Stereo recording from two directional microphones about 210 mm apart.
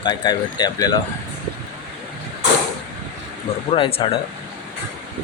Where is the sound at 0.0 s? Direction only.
20° left (ahead or behind).